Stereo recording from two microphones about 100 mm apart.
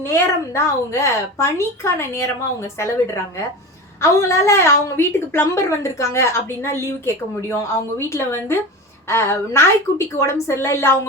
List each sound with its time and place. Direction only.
0.0 s a woman's voice: 30° left (ahead or behind)